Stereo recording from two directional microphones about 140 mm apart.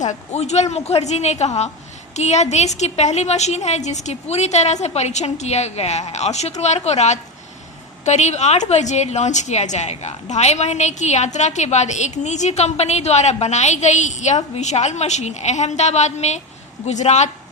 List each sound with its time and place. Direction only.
0.0 s a woman's voice: 55° left (ahead or behind)